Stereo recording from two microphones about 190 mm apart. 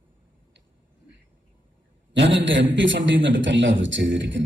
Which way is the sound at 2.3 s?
75° right (ahead or behind).